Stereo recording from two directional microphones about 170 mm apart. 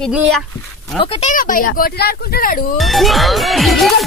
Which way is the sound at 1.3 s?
55° left (ahead or behind).